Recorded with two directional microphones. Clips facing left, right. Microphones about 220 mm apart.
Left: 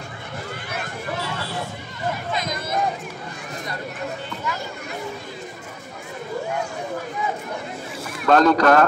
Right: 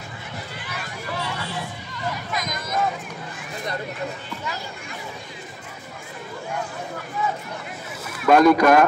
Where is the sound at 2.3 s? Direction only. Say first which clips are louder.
Left 2 dB; 30° left (ahead or behind).